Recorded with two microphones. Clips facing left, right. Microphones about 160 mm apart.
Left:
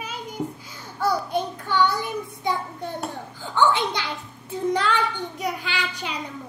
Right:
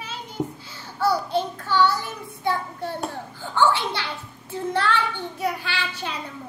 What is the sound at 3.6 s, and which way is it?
A woman's voice, 15° left (ahead or behind).